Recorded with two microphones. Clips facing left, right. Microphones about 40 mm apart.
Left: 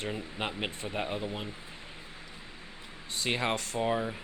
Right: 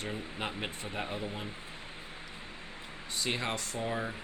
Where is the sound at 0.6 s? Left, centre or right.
Left.